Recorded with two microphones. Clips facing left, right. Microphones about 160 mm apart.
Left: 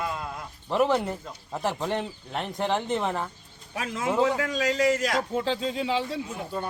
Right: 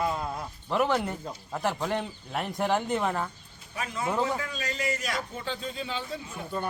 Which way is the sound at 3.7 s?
90° left.